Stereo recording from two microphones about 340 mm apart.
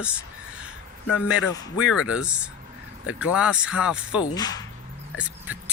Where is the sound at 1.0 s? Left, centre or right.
Left.